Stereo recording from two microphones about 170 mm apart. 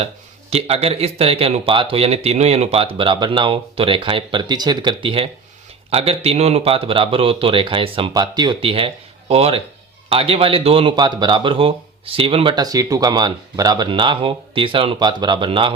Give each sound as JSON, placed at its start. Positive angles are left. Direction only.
{"t": 0.5, "sound": "speech", "side_deg": -35}